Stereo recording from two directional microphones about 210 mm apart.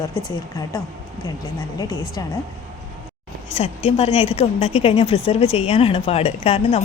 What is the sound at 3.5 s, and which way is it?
A woman's voice, 30° left (ahead or behind).